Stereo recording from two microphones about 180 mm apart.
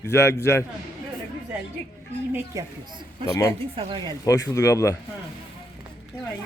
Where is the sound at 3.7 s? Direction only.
30° right (ahead or behind).